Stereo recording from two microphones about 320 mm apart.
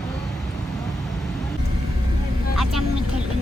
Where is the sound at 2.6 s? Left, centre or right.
Centre.